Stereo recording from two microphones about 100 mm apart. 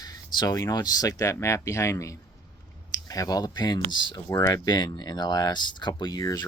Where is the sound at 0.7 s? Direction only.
40° left (ahead or behind).